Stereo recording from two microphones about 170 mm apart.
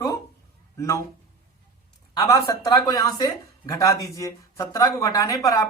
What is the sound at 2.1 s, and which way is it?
A woman's voice, 20° left (ahead or behind).